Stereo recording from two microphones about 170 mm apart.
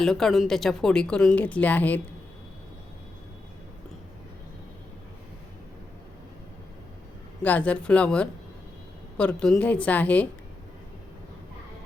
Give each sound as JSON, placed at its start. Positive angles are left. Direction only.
{"t": 0.0, "sound": "a woman's voice", "side_deg": 5}
{"t": 7.4, "sound": "a woman's voice", "side_deg": 10}